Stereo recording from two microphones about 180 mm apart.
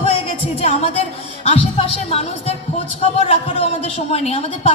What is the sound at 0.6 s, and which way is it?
A woman's voice, 35° left (ahead or behind).